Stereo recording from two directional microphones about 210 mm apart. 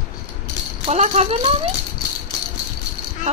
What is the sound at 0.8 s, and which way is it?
Speech, 35° right (ahead or behind).